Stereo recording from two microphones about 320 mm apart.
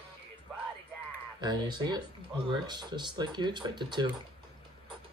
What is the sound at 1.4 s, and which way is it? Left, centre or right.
Speech, centre.